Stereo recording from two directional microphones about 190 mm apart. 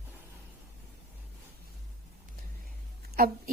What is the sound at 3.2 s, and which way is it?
Speech, 50° right (ahead or behind).